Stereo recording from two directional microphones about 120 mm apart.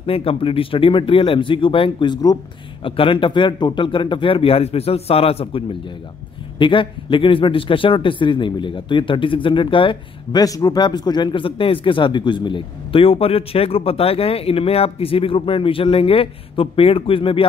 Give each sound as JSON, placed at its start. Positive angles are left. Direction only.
{"t": 0.0, "sound": "speech", "side_deg": 50}
{"t": 10.4, "sound": "speech", "side_deg": 30}